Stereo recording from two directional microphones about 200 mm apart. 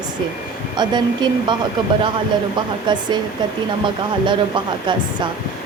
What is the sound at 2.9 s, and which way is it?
Speech, 20° right (ahead or behind).